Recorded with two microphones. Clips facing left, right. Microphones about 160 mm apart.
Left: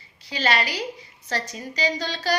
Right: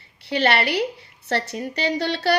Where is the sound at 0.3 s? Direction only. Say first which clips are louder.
Right 4 dB; 65° right (ahead or behind).